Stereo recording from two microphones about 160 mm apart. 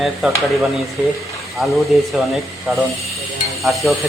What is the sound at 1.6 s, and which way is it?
Speech, centre (ahead or behind).